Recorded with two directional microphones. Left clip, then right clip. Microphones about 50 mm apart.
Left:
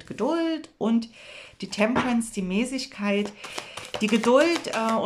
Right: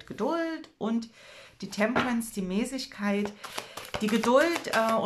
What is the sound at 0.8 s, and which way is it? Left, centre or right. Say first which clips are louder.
Speech: left 5 dB; left.